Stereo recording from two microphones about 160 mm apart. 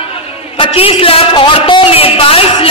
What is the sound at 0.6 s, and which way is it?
A man's voice, 35° left (ahead or behind).